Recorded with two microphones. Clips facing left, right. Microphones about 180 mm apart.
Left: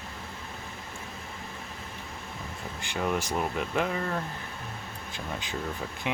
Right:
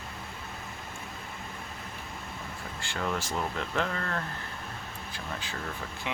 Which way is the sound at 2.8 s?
15° left (ahead or behind).